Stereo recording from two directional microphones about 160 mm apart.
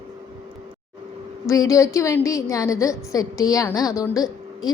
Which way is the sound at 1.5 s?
20° left (ahead or behind).